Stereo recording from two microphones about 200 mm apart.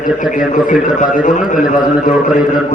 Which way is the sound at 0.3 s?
40° left (ahead or behind).